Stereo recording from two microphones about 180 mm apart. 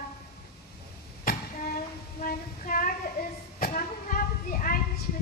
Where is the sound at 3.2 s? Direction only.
60° left (ahead or behind).